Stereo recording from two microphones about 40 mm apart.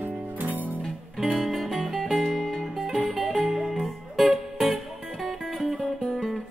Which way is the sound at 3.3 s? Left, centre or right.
Centre.